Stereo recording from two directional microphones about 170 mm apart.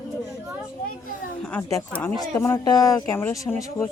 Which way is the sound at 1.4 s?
5° left (ahead or behind).